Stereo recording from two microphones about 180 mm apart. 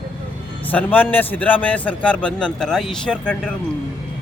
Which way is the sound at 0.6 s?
10° left (ahead or behind).